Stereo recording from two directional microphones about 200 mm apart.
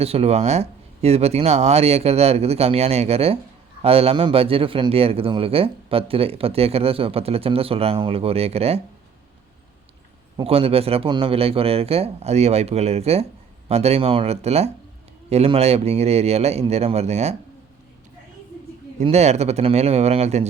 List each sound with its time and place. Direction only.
0.0 s a man's voice: 30° right (ahead or behind)
10.3 s a man's voice: 30° right (ahead or behind)
19.0 s speech: 35° right (ahead or behind)